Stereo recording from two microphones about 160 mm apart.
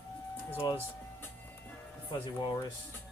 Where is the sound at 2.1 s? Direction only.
30° left (ahead or behind).